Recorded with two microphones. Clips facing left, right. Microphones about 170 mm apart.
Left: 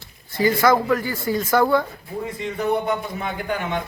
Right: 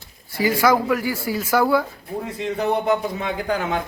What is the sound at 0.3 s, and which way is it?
Speech, 10° right (ahead or behind).